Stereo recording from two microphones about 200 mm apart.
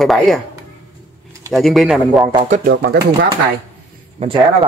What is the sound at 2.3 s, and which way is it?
Speech, 30° right (ahead or behind).